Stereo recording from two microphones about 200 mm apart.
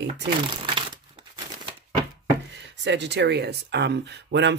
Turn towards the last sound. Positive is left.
turn(degrees=-60)  # may be behind; listen again after turning